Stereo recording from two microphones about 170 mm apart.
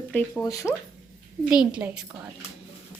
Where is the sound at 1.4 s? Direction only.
5° right (ahead or behind).